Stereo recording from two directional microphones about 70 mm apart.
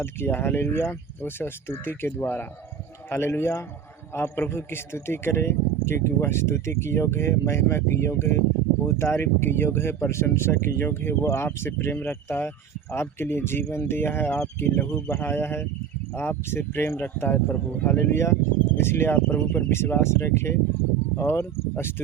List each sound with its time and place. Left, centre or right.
0.0 s speech: left
17.8 s speech: left